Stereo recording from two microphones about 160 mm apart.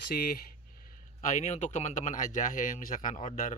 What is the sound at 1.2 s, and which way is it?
Speech, 50° left (ahead or behind).